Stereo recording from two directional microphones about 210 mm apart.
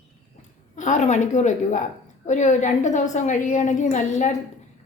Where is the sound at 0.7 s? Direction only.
35° left (ahead or behind).